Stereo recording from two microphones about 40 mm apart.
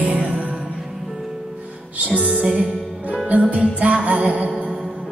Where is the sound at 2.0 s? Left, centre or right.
Right.